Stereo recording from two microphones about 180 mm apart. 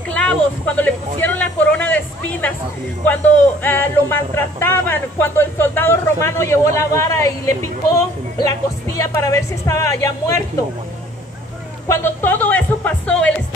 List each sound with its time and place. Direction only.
0.1 s speech: 10° left (ahead or behind)
3.6 s speech: 10° left (ahead or behind)
11.9 s speech: 10° left (ahead or behind)